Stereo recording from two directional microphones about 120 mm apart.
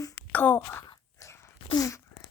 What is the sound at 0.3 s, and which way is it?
Speech, 15° left (ahead or behind).